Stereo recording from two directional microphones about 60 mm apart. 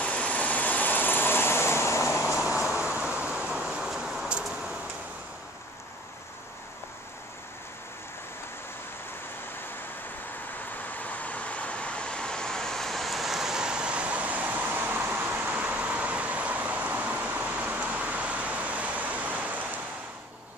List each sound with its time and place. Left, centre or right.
0.0 s vehicle: left
2.3 s vehicle: centre
4.5 s a sound: centre
10.9 s vehicle: left; by 19.8 s right